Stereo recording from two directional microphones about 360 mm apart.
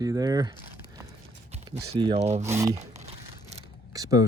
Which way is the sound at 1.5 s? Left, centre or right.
Centre.